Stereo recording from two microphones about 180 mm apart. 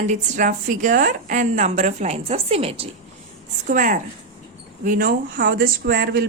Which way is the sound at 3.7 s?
50° right (ahead or behind).